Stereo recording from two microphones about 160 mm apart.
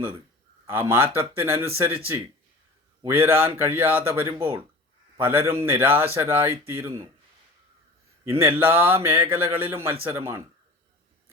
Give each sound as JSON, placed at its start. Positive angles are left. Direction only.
{"t": 0.7, "sound": "speech", "side_deg": -15}
{"t": 3.0, "sound": "a man's voice", "side_deg": -15}
{"t": 8.4, "sound": "speech", "side_deg": -15}